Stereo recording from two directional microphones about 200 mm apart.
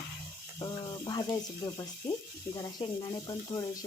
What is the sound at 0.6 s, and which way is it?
Speech, 20° left (ahead or behind).